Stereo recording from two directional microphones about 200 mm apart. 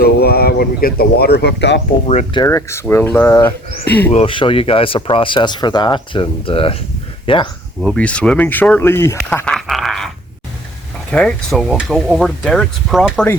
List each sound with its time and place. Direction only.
0.0 s speech: 50° left (ahead or behind)
2.0 s speech: 30° left (ahead or behind)
2.4 s speech: 15° left (ahead or behind)
4.1 s speech: 30° left (ahead or behind)
7.8 s speech: 5° left (ahead or behind)
11.1 s speech: 5° left (ahead or behind)